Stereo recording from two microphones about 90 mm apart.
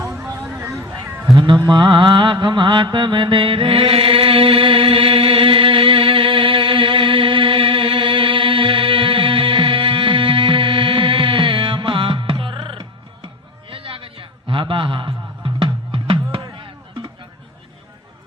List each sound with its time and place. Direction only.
0.1 s a sound: 25° right (ahead or behind)
0.5 s vehicle: 35° right (ahead or behind)
1.5 s mantra: 50° right (ahead or behind); by 12.8 s 70° right (ahead or behind)
13.7 s music: 90° right
16.4 s music: 50° right (ahead or behind)